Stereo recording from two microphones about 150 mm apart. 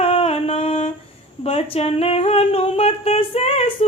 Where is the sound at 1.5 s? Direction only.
40° left (ahead or behind).